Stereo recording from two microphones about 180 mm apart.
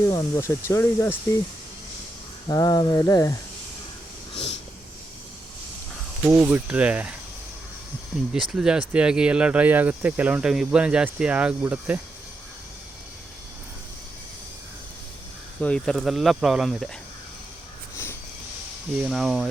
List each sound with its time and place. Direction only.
0.1 s speech: 20° left (ahead or behind)
2.5 s a sound: 20° left (ahead or behind)
6.2 s speech: 10° right (ahead or behind)
8.3 s speech: 5° right (ahead or behind)
15.6 s speech: 5° left (ahead or behind)
17.9 s a sound: 15° left (ahead or behind)
19.0 s speech: centre (ahead or behind)